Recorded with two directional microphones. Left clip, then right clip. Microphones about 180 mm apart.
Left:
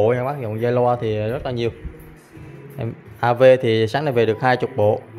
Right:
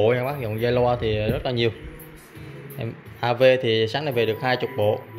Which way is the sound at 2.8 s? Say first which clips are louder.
Left 5 dB; 20° left (ahead or behind).